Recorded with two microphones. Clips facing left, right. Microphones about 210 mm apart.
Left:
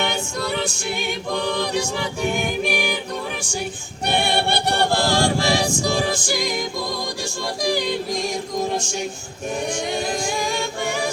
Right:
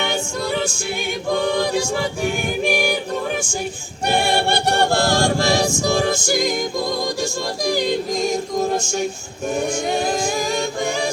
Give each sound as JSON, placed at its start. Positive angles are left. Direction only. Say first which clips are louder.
{"t": 2.6, "sound": "choir", "louder": "right 4 dB", "side_deg": -45}
{"t": 4.0, "sound": "choir", "louder": "right 2 dB", "side_deg": -45}
{"t": 7.6, "sound": "choir", "louder": "right 2 dB", "side_deg": -45}